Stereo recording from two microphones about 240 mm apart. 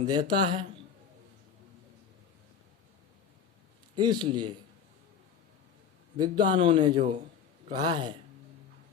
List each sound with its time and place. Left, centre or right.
0.0 s speech: centre
3.9 s speech: centre
6.1 s speech: centre